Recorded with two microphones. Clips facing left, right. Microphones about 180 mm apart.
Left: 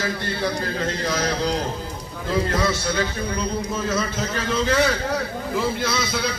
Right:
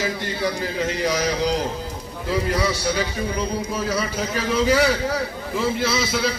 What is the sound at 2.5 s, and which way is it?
A man's voice, 15° right (ahead or behind).